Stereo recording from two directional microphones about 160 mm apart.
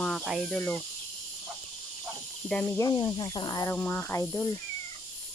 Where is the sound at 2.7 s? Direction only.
25° left (ahead or behind).